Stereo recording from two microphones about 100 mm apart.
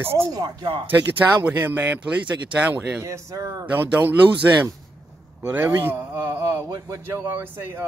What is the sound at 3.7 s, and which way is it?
A man's voice, 20° right (ahead or behind).